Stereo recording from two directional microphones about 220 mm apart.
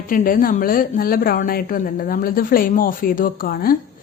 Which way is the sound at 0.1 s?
40° left (ahead or behind).